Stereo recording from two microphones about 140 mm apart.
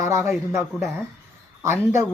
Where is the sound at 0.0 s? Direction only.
20° right (ahead or behind).